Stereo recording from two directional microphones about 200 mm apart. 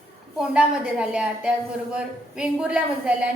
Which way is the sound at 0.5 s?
5° right (ahead or behind).